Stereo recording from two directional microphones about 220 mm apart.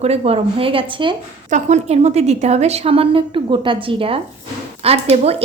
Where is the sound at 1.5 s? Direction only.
35° right (ahead or behind).